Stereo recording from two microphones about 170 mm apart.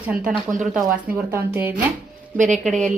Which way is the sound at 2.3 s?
45° right (ahead or behind).